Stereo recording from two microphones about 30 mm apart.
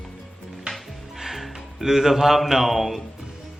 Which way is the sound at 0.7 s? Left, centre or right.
Centre.